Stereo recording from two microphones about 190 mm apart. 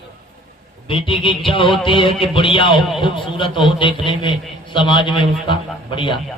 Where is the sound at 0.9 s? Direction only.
25° left (ahead or behind).